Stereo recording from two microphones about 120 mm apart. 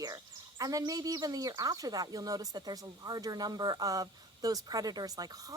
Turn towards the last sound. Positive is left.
turn(degrees=-30)  # may be behind; listen again after turning